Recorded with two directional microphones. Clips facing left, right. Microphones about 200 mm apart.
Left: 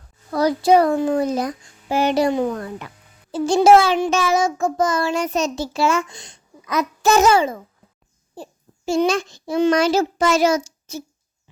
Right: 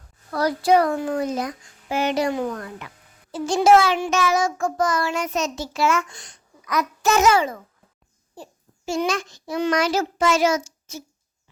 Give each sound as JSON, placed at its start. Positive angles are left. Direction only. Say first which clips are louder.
{"t": 0.3, "sound": "child singing", "louder": "left 3 dB", "side_deg": 20}
{"t": 8.4, "sound": "a child's voice", "louder": "left 4 dB", "side_deg": 30}